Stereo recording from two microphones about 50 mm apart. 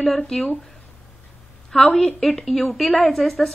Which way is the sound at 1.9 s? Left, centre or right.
Centre.